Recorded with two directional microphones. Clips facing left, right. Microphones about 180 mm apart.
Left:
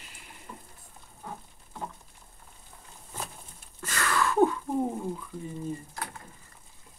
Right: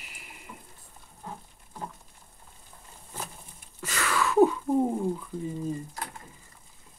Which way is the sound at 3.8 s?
10° right (ahead or behind).